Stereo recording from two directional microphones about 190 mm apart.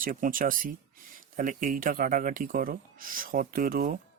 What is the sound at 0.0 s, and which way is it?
Speech, 45° right (ahead or behind).